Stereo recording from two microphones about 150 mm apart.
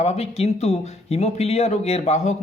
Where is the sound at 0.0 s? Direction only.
45° left (ahead or behind).